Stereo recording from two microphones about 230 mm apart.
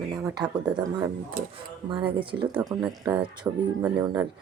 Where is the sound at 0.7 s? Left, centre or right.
Centre.